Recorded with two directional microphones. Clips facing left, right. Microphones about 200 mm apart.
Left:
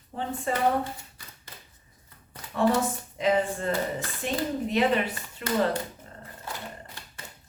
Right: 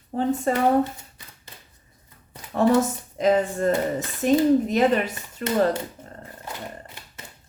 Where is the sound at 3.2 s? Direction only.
40° right (ahead or behind).